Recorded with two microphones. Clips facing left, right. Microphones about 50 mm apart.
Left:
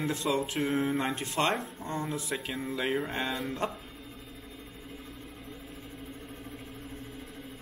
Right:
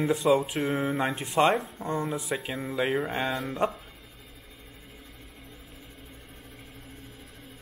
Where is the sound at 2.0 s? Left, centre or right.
Centre.